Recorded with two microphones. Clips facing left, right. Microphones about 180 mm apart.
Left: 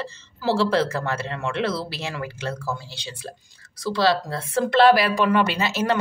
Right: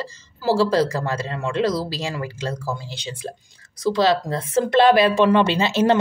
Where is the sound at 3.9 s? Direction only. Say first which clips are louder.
Right 3 dB; 20° right (ahead or behind).